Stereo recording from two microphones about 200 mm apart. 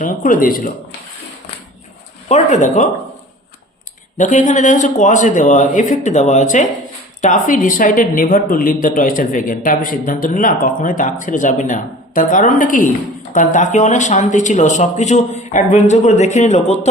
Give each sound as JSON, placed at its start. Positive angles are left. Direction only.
{"t": 0.0, "sound": "speech", "side_deg": 40}
{"t": 2.3, "sound": "speech", "side_deg": 35}
{"t": 4.2, "sound": "speech", "side_deg": 35}